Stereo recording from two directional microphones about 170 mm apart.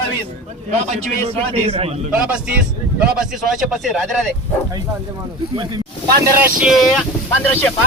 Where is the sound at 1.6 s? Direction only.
35° right (ahead or behind).